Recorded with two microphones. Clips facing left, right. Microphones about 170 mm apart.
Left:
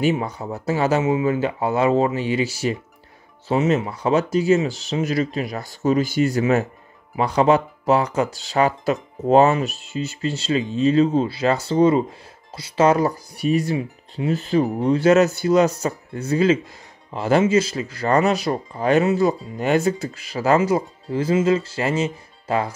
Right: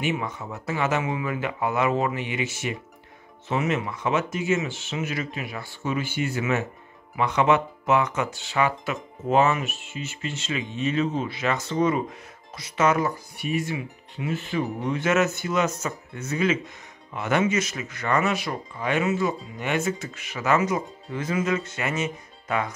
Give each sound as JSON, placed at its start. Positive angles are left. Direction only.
{"t": 0.0, "sound": "speech", "side_deg": 35}